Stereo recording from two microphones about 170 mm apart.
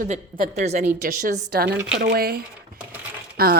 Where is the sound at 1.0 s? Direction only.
55° right (ahead or behind).